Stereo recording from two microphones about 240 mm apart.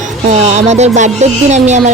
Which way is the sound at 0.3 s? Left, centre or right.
Right.